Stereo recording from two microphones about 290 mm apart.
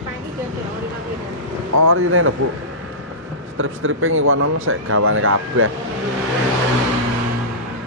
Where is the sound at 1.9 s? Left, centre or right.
Right.